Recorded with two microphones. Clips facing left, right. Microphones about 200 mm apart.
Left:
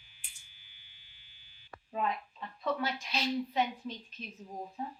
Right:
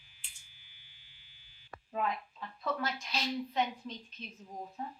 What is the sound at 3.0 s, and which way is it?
Speech, centre (ahead or behind).